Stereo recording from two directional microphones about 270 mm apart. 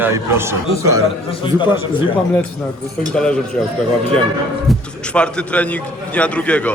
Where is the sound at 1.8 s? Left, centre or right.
Centre.